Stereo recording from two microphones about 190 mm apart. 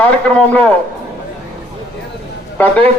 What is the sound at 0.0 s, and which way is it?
Speech, 5° left (ahead or behind).